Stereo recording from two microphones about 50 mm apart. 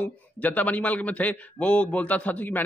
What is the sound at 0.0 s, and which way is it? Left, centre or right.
Speech, left.